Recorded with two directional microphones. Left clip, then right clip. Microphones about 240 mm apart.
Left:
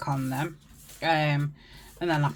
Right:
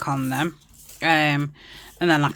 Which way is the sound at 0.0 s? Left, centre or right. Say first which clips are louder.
Right 6 dB; right.